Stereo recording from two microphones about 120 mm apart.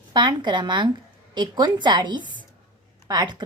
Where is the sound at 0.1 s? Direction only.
40° right (ahead or behind).